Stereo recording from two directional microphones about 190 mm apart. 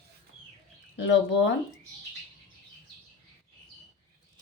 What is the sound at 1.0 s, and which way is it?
Speech, 70° left (ahead or behind).